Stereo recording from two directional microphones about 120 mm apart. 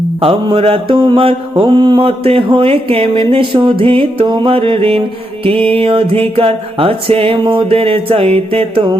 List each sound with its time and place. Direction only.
0.2 s music: 50° right (ahead or behind)
2.0 s music: 55° right (ahead or behind)